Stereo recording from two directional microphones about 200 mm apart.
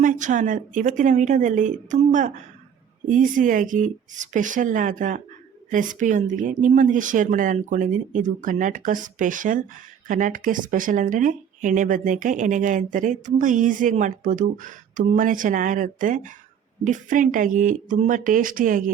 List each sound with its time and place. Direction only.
0.0 s speech: 40° right (ahead or behind)